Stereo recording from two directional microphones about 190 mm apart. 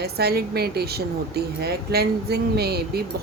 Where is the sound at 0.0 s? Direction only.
55° right (ahead or behind).